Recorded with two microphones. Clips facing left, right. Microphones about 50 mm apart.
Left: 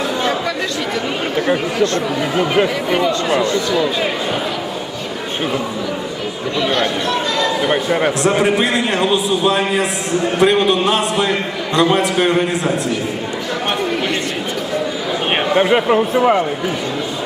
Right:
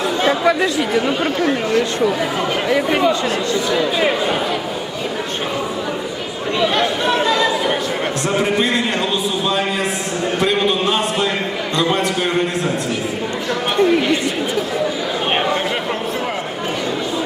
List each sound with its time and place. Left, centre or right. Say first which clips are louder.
2.3 s a man's voice: left 5 dB; centre
2.7 s speech: right 1 dB; centre
6.6 s chatter: even; centre
7.7 s a sound: left 4 dB; centre
8.3 s a man's voice: even; centre
13.7 s speech: right 9 dB; centre
15.5 s a man's voice: left 8 dB; centre